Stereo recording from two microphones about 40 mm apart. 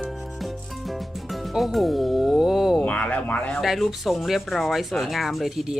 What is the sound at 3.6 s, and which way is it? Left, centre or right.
Rub, centre.